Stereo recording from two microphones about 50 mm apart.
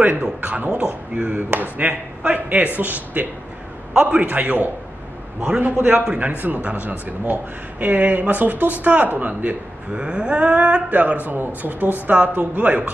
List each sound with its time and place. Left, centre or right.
0.4 s speech: right
3.9 s speech: centre
9.9 s speech: centre
11.2 s speech: right